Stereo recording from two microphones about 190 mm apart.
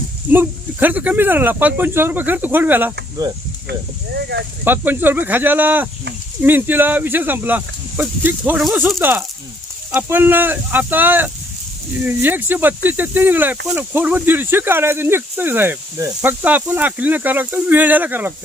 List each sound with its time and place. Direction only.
0.3 s speech: 10° right (ahead or behind)
3.7 s speech: 60° right (ahead or behind)
4.6 s speech: 10° right (ahead or behind)